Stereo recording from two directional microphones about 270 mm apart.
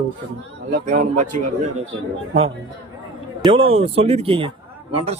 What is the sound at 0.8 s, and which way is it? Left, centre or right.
Speech, right.